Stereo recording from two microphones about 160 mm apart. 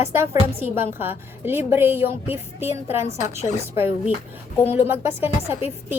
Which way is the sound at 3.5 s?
50° left (ahead or behind).